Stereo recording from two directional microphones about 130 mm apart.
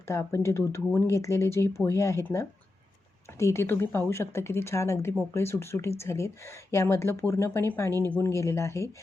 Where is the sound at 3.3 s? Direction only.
20° left (ahead or behind).